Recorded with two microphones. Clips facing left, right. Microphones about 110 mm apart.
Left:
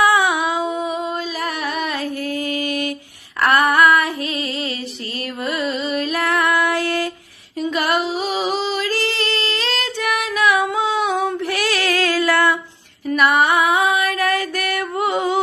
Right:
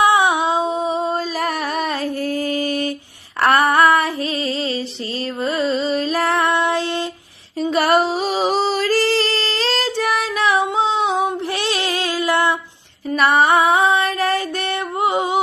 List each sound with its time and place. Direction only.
0.0 s a sound: 25° right (ahead or behind)
3.4 s female singing: 35° right (ahead or behind)
5.4 s music: 30° right (ahead or behind)
7.6 s female singing: 35° right (ahead or behind); by 12.5 s 20° right (ahead or behind)
13.1 s female singing: 30° right (ahead or behind)